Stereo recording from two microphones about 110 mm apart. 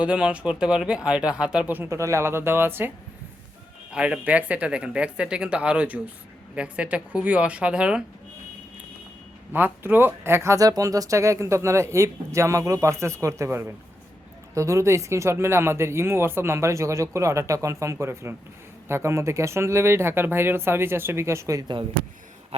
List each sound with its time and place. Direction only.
0.0 s speech: 10° right (ahead or behind)
3.9 s speech: 10° right (ahead or behind)
9.5 s speech: 15° right (ahead or behind)